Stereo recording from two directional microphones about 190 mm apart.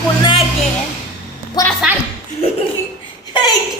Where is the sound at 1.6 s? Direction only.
20° left (ahead or behind).